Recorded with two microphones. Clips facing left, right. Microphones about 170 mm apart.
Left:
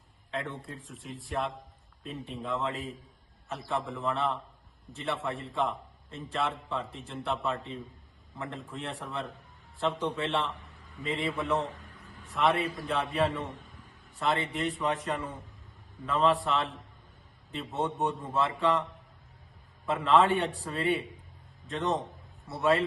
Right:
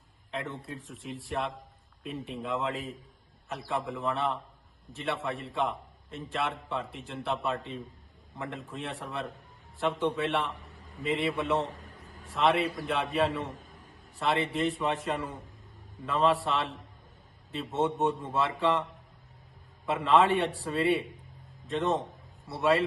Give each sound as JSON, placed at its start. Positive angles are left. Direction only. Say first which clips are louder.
{"t": 0.4, "sound": "a man's voice", "louder": "right 1 dB", "side_deg": 0}
{"t": 11.8, "sound": "a sound", "louder": "right 1 dB", "side_deg": -40}
{"t": 12.2, "sound": "a man's voice", "louder": "right 1 dB", "side_deg": 0}
{"t": 13.6, "sound": "a sound", "louder": "even", "side_deg": -45}
{"t": 14.2, "sound": "a man's voice", "louder": "right 2 dB", "side_deg": 0}
{"t": 19.9, "sound": "a man's voice", "louder": "even", "side_deg": 0}